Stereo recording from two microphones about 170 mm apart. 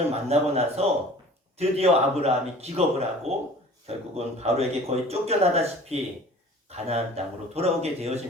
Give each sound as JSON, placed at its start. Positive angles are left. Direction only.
{"t": 0.1, "sound": "speech", "side_deg": -35}